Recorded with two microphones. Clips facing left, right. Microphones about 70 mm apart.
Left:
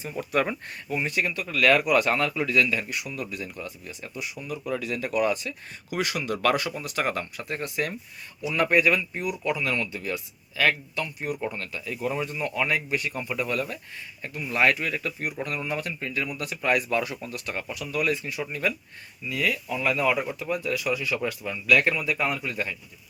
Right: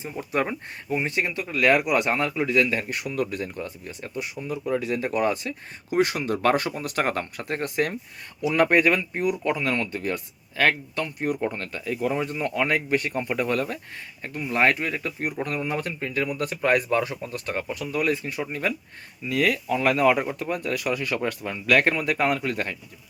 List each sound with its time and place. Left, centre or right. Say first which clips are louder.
0.0 s speech: even; right
19.3 s speech: right 5 dB; right